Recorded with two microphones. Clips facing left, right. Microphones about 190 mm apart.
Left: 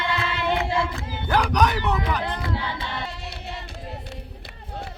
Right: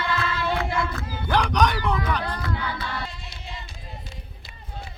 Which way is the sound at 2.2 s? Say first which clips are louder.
Left 1 dB; 25° left (ahead or behind).